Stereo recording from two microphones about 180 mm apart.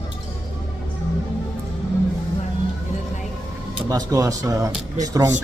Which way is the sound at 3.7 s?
20° right (ahead or behind).